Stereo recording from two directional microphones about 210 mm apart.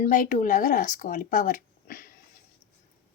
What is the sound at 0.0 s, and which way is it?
Speech, 40° left (ahead or behind).